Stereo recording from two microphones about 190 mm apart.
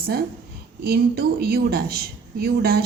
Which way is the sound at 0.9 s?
55° right (ahead or behind).